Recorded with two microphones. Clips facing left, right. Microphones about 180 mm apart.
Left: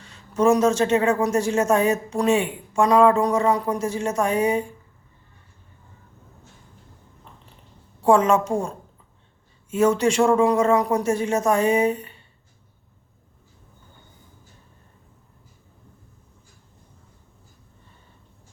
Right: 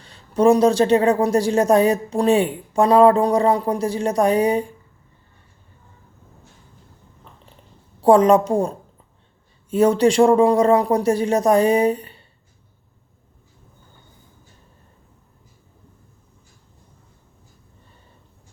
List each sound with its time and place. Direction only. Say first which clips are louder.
0.0 s a woman's voice: right 4 dB; 35° right (ahead or behind)
8.0 s a woman's voice: right 4 dB; 35° right (ahead or behind)